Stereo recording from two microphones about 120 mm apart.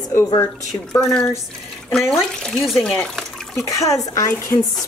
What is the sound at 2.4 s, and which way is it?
Speech, 5° left (ahead or behind).